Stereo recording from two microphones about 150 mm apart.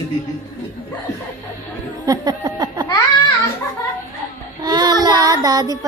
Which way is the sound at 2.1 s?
25° right (ahead or behind).